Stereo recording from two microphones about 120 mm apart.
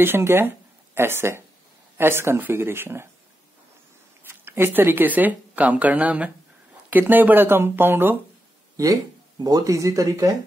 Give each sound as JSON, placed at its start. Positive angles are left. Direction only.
{"t": 0.0, "sound": "speech", "side_deg": -20}
{"t": 4.3, "sound": "speech", "side_deg": -20}
{"t": 8.8, "sound": "speech", "side_deg": -30}